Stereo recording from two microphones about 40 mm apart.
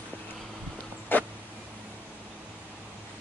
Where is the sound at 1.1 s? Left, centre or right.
Left.